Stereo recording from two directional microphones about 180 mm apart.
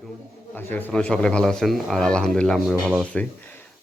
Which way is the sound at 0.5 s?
10° left (ahead or behind).